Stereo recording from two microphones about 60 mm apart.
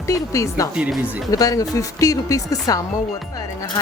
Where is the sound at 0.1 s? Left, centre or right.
Left.